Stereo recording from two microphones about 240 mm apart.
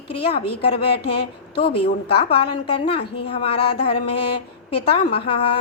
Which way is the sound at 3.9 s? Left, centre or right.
Left.